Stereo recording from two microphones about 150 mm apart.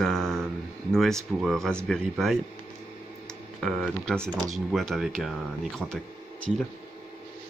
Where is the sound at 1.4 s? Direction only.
Centre (ahead or behind).